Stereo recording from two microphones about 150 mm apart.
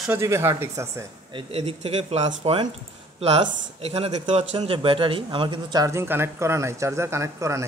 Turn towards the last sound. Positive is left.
turn(degrees=-20)  # may be behind; listen again after turning